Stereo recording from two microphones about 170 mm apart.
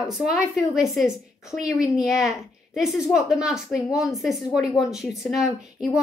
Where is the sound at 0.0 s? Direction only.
Centre (ahead or behind).